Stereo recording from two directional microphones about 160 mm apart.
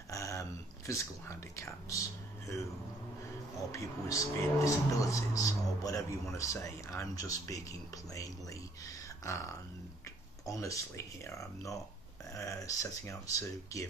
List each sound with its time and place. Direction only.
0.1 s a sound: 20° left (ahead or behind)
3.7 s speech: 20° left (ahead or behind)
9.2 s speech: 20° left (ahead or behind)